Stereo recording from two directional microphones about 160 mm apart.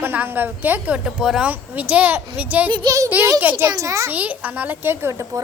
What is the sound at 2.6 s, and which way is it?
Speech, 25° right (ahead or behind).